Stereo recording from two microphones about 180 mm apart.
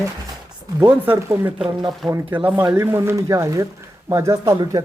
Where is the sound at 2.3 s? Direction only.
10° right (ahead or behind).